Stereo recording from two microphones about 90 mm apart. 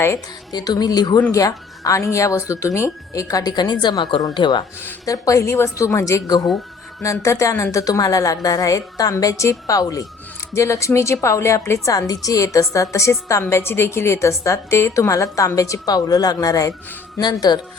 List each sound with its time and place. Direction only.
0.5 s a woman's voice: 50° left (ahead or behind)
5.0 s a woman's voice: 40° left (ahead or behind)
17.2 s speech: 55° left (ahead or behind)